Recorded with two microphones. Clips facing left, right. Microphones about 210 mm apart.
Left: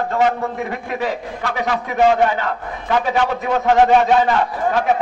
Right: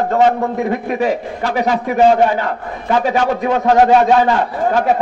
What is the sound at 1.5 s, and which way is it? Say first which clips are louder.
A man's voice: right 5 dB; 35° right (ahead or behind).